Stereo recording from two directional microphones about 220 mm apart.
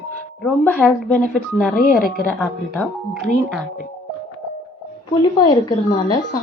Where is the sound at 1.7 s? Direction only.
40° left (ahead or behind).